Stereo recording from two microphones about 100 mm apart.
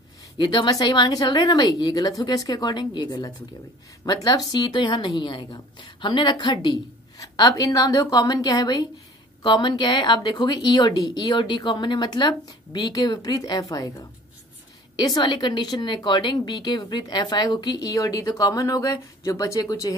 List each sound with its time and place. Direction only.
0.4 s a woman's voice: 45° left (ahead or behind)
15.0 s a woman's voice: 45° left (ahead or behind)